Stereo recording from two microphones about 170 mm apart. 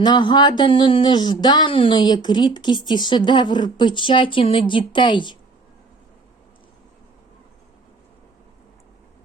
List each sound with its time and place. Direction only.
0.0 s speech: 25° left (ahead or behind)